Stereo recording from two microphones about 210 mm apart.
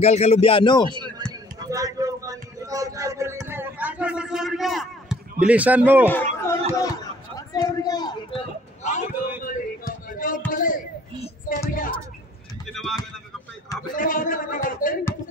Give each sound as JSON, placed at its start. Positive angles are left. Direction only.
{"t": 0.0, "sound": "speech", "side_deg": 30}
{"t": 0.8, "sound": "a sound", "side_deg": -20}
{"t": 5.4, "sound": "a man's voice", "side_deg": -5}
{"t": 6.0, "sound": "speech", "side_deg": 10}
{"t": 6.7, "sound": "chatter", "side_deg": 15}
{"t": 10.0, "sound": "music", "side_deg": 40}
{"t": 10.5, "sound": "a sound", "side_deg": 40}
{"t": 11.7, "sound": "speech", "side_deg": 40}
{"t": 12.7, "sound": "a sound", "side_deg": 0}
{"t": 13.9, "sound": "speech", "side_deg": 40}